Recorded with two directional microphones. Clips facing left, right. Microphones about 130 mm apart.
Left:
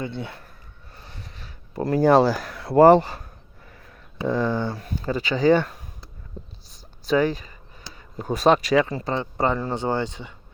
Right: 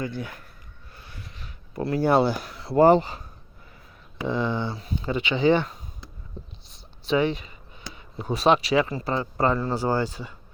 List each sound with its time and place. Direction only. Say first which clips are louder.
0.0 s speech: even; 25° left (ahead or behind)
0.9 s a sound: left 1 dB; 35° left (ahead or behind)
2.4 s speech: left 4 dB; 60° left (ahead or behind)
2.7 s speech: left 3 dB; 40° left (ahead or behind)
9.6 s speech: even; 20° left (ahead or behind)